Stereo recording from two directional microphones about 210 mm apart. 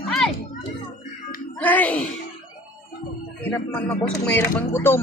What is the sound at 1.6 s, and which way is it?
Speech, 10° left (ahead or behind).